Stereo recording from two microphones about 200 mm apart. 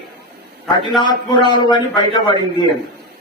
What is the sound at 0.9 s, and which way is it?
A man's voice, 20° left (ahead or behind).